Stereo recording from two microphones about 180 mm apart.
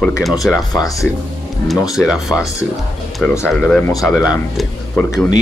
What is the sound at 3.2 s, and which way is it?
Speech, 15° left (ahead or behind).